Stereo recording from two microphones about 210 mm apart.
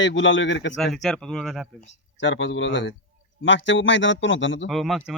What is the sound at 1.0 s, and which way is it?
Speech, centre (ahead or behind).